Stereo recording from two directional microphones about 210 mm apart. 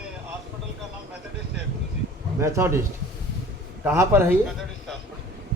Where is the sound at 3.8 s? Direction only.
10° right (ahead or behind).